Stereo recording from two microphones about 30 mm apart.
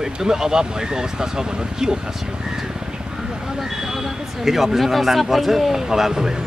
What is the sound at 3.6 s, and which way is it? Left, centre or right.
Vehicle, centre.